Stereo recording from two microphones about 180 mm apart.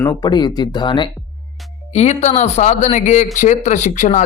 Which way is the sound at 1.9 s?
40° left (ahead or behind).